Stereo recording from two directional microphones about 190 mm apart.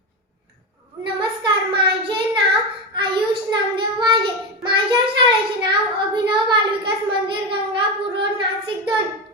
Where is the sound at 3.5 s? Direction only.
25° right (ahead or behind).